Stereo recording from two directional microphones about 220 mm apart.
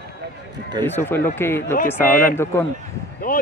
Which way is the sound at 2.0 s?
35° left (ahead or behind).